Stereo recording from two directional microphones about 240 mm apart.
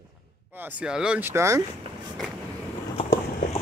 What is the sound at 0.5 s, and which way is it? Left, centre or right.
Speech, centre.